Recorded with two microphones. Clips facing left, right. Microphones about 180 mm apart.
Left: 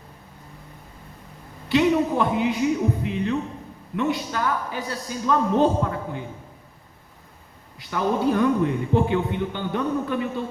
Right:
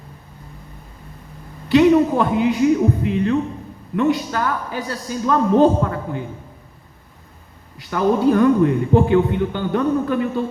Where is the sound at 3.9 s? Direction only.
55° right (ahead or behind).